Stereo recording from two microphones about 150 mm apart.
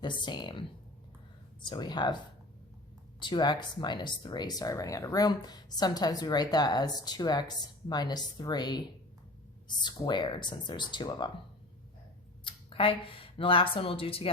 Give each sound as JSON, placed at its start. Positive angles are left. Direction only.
{"t": 0.0, "sound": "speech", "side_deg": 30}
{"t": 1.6, "sound": "speech", "side_deg": 30}
{"t": 3.2, "sound": "speech", "side_deg": 30}
{"t": 12.5, "sound": "speech", "side_deg": 35}